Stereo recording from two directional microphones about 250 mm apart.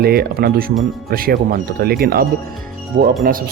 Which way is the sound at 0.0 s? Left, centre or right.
Right.